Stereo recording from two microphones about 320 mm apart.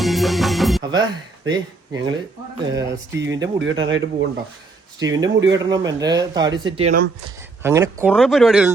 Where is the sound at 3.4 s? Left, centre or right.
Right.